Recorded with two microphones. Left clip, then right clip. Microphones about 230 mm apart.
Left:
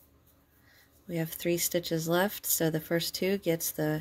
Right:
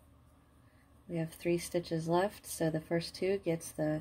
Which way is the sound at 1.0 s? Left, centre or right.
Left.